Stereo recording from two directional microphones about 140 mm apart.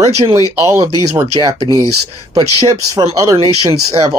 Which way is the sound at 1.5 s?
35° right (ahead or behind).